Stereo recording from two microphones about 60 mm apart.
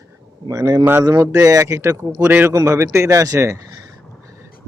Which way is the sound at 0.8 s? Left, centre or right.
Right.